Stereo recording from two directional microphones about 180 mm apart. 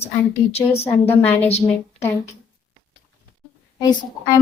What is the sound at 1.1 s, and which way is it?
Speech, 10° left (ahead or behind).